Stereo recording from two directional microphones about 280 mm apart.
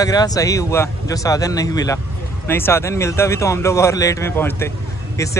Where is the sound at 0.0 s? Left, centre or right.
Centre.